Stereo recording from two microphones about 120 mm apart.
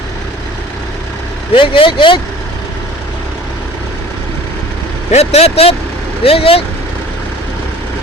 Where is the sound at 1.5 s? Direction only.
45° left (ahead or behind).